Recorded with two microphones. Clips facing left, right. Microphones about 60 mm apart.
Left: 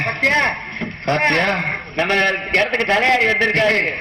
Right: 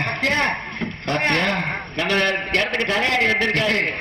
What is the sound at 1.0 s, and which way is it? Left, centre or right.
A man's voice, left.